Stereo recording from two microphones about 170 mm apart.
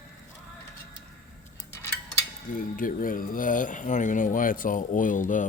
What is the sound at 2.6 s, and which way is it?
Speech, 55° left (ahead or behind).